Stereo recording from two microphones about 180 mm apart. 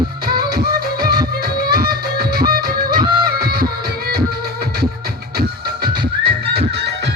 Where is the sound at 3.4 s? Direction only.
60° right (ahead or behind).